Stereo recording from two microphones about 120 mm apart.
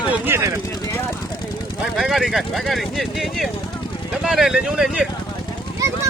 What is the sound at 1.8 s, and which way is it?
Speech, centre (ahead or behind).